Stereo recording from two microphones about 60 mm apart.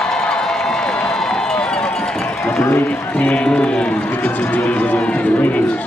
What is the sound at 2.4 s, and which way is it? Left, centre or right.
Run, left.